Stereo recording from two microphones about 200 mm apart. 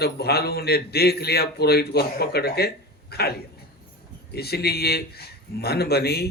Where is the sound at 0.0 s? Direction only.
50° left (ahead or behind).